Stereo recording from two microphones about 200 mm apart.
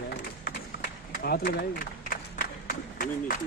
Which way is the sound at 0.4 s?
50° left (ahead or behind).